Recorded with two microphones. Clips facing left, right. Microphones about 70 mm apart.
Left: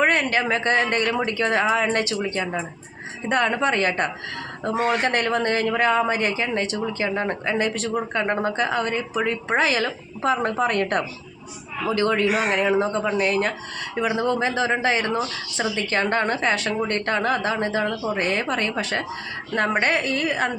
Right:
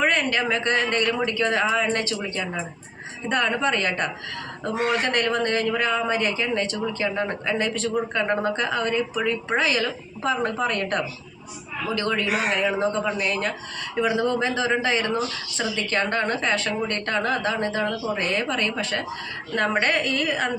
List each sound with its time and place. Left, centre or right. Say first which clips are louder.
0.0 s speech: left 2 dB; centre
3.4 s speech: left 2 dB; left
4.6 s speech: left 2 dB; left
5.1 s speech: left 1 dB; left
9.6 s speech: left 4 dB; left
13.9 s speech: even; centre
18.2 s speech: left 2 dB; left